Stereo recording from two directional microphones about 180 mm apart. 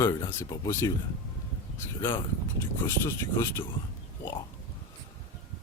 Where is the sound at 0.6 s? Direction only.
15° left (ahead or behind).